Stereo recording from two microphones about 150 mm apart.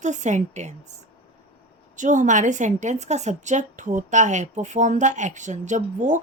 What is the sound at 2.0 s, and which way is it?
A woman's voice, 55° right (ahead or behind).